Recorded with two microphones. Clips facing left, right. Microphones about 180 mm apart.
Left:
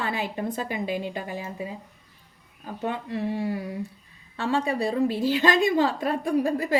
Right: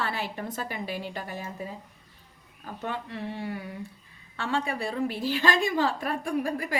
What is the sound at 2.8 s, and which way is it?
A woman's voice, 20° left (ahead or behind).